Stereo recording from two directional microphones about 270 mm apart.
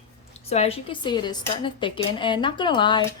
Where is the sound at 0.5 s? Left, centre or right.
Left.